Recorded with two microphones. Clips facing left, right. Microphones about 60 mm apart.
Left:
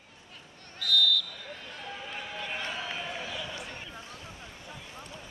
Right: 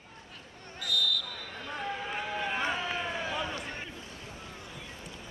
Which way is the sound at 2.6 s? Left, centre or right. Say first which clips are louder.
Right 4 dB; right.